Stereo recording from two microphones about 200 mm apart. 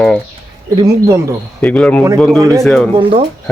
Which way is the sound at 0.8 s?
15° right (ahead or behind).